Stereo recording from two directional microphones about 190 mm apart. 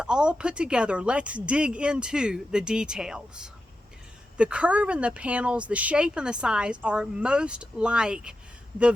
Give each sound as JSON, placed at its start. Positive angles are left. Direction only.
{"t": 0.0, "sound": "speech", "side_deg": -5}